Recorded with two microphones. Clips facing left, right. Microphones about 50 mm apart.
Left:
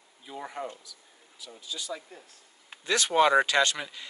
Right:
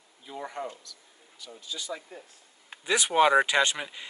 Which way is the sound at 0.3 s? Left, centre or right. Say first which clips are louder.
Right 1 dB; centre.